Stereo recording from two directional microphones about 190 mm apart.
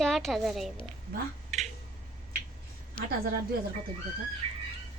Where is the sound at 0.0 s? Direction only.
Centre (ahead or behind).